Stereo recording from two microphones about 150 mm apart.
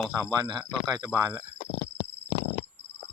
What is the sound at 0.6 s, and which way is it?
Speech, 10° right (ahead or behind).